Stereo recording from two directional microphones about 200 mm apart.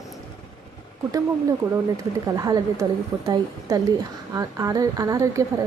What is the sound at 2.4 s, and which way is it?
A woman's voice, 15° right (ahead or behind).